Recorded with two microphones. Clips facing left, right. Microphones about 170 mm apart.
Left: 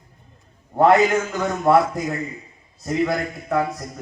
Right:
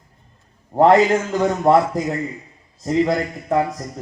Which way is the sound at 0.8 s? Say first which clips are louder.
Right 2 dB; 30° right (ahead or behind).